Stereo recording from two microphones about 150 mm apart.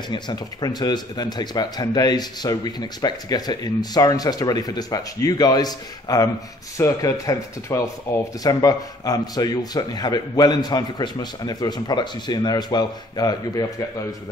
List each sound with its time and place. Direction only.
0.1 s speech: 30° left (ahead or behind)